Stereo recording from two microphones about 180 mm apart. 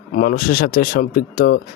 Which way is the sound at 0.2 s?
55° left (ahead or behind).